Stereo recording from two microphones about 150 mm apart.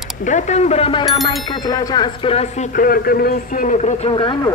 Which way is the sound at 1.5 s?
25° left (ahead or behind).